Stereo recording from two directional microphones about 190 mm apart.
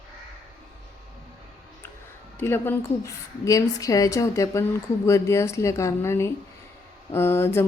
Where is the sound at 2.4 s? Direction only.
10° left (ahead or behind).